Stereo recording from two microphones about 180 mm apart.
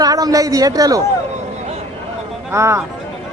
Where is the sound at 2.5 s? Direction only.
15° right (ahead or behind).